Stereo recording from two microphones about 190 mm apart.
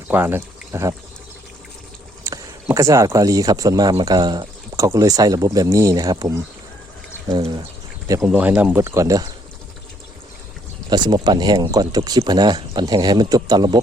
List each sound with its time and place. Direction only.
0.1 s speech: 10° right (ahead or behind)
2.2 s speech: 15° right (ahead or behind)
10.8 s speech: 25° right (ahead or behind)